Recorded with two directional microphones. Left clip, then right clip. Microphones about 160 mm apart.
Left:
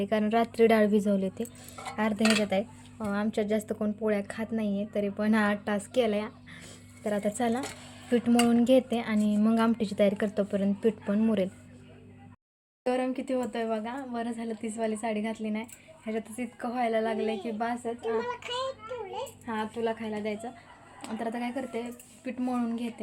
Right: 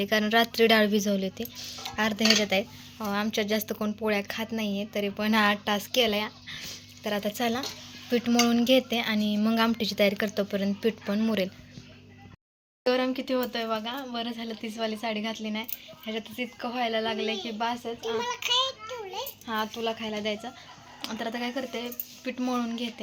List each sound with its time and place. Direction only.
0.0 s a woman's voice: 5° left (ahead or behind)
12.8 s a woman's voice: centre (ahead or behind)
18.2 s a sound: 25° left (ahead or behind)
19.5 s speech: centre (ahead or behind)